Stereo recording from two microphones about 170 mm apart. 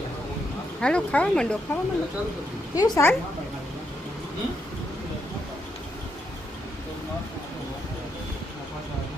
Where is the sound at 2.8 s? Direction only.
20° left (ahead or behind).